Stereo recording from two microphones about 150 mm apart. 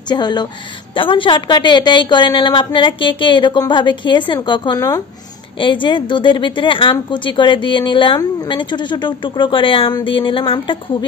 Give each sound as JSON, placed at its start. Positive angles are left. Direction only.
{"t": 0.1, "sound": "a woman's voice", "side_deg": 30}